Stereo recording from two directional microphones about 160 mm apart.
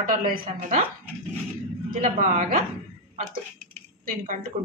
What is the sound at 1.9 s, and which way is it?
Speech, 50° right (ahead or behind).